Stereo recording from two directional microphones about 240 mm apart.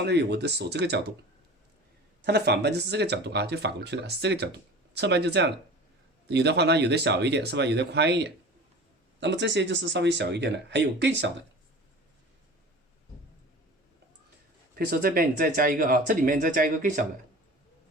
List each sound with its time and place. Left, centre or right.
0.0 s speech: right
2.2 s speech: right
14.8 s speech: right